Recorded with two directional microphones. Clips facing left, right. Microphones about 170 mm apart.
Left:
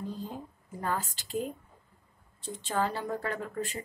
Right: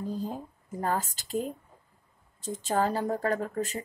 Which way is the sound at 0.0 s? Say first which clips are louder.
Right 4 dB; 40° right (ahead or behind).